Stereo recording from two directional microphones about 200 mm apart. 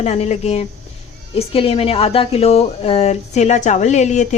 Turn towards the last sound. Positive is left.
turn(degrees=35)  # may be behind; listen again after turning